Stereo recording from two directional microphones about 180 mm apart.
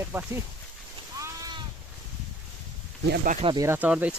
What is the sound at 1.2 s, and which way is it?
Sheep, 20° right (ahead or behind).